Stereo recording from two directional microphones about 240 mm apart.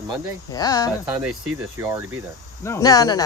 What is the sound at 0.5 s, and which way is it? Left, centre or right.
Speech, centre.